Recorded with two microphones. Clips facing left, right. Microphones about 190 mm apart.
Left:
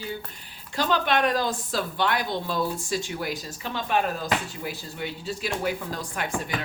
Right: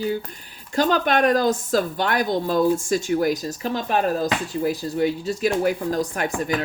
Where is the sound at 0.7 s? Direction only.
45° right (ahead or behind).